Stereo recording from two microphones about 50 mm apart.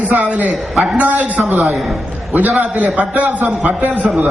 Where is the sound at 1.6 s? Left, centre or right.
Centre.